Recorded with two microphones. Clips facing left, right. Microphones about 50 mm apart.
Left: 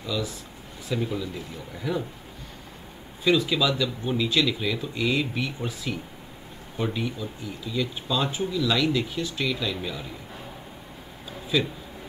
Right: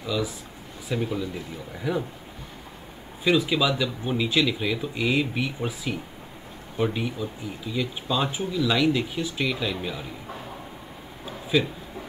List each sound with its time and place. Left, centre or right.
0.0 s speech: centre
3.3 s speech: centre
11.5 s speech: centre